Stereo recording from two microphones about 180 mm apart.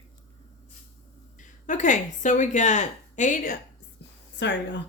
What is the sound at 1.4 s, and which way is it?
Speech, 45° left (ahead or behind).